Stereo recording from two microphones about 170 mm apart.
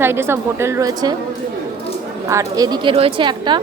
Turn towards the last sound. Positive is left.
turn(degrees=-25)  # may be behind; listen again after turning